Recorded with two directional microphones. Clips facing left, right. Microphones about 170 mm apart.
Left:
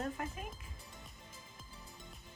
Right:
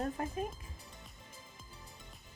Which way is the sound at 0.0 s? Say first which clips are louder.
Right 4 dB; 35° right (ahead or behind).